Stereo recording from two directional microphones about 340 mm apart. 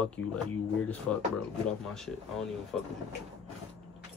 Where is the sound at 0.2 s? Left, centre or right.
Left.